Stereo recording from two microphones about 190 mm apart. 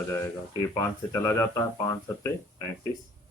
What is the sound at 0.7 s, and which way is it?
Speech, 15° left (ahead or behind).